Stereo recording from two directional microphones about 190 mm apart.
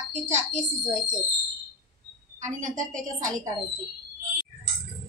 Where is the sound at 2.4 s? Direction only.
40° right (ahead or behind).